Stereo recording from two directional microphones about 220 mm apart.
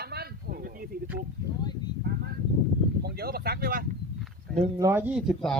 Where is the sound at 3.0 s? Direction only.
45° right (ahead or behind).